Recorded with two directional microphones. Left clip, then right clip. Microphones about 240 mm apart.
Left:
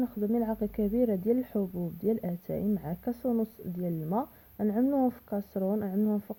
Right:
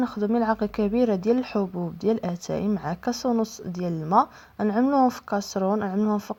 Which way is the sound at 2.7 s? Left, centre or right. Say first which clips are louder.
Right 7 dB; centre.